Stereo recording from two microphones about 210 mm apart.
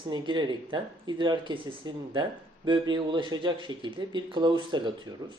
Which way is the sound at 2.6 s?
20° right (ahead or behind).